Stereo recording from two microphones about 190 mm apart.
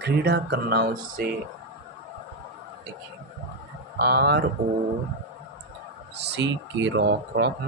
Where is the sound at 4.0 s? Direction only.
60° right (ahead or behind).